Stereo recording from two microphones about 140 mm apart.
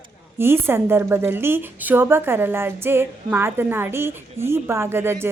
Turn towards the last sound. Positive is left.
turn(degrees=-15)  # may be behind; listen again after turning